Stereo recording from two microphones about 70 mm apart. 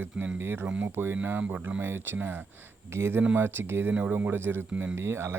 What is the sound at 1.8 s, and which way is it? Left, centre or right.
Speech, right.